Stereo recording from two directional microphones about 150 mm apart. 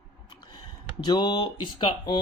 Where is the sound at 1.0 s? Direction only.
30° left (ahead or behind).